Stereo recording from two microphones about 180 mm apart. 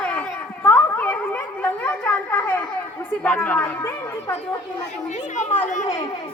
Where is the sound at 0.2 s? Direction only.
10° left (ahead or behind).